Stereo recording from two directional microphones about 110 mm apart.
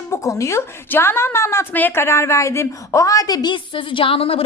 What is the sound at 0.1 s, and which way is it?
A woman's voice, 25° left (ahead or behind).